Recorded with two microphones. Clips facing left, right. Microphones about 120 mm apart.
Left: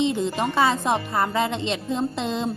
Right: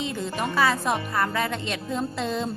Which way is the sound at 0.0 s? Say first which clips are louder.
Left 6 dB; 20° left (ahead or behind).